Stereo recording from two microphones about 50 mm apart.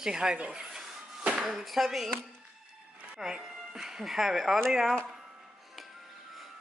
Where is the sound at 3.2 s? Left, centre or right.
Centre.